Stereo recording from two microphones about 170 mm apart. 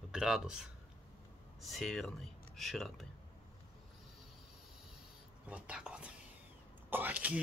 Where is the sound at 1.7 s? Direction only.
Centre (ahead or behind).